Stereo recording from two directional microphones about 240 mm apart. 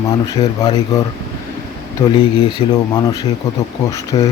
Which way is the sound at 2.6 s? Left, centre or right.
Left.